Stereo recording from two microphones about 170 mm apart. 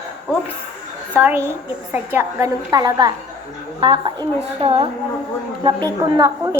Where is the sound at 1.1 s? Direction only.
10° right (ahead or behind); by 5.8 s 35° right (ahead or behind).